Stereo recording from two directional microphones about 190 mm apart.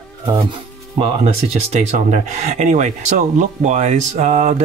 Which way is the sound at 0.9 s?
30° right (ahead or behind).